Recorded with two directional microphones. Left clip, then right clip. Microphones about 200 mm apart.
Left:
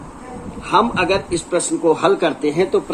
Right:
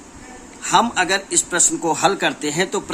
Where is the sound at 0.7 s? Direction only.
50° right (ahead or behind).